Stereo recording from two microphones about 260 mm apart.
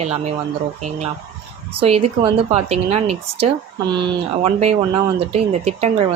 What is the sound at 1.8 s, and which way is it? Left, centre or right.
A woman's voice, right.